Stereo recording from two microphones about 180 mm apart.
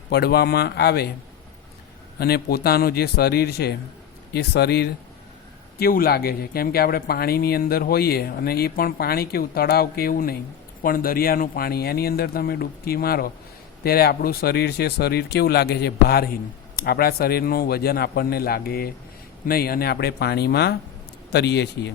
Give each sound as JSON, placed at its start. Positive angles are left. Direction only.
{"t": 0.1, "sound": "speech", "side_deg": 65}
{"t": 2.1, "sound": "a man's voice", "side_deg": 60}